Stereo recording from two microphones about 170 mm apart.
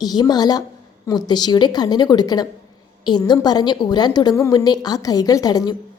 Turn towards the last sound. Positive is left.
turn(degrees=25)  # may be behind; listen again after turning